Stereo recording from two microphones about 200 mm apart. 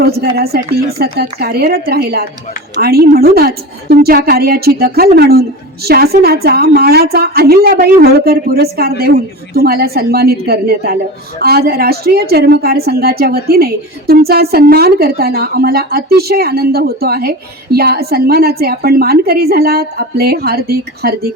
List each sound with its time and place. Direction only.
0.0 s a woman's voice: 50° right (ahead or behind)